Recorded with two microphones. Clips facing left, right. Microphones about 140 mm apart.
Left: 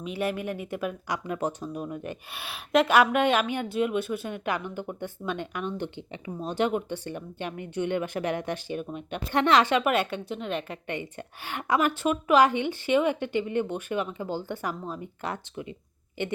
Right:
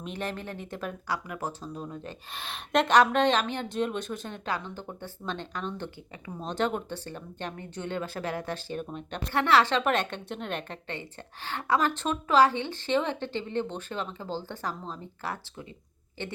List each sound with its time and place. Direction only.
0.0 s speech: 10° left (ahead or behind)
11.4 s speech: 15° left (ahead or behind)